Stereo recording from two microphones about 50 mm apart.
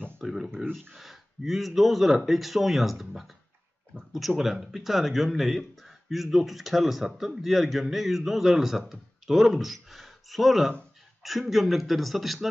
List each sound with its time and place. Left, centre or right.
0.2 s speech: centre